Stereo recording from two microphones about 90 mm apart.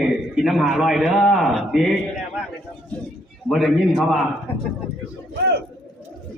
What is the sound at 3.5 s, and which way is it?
Speech, centre (ahead or behind).